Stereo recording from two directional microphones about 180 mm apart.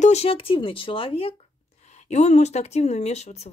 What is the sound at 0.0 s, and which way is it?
Speech, 35° left (ahead or behind).